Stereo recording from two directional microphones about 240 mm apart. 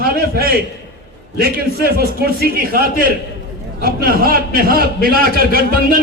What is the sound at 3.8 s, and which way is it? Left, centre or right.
A man's voice, right.